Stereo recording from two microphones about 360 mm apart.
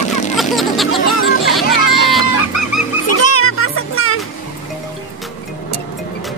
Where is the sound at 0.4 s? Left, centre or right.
Centre.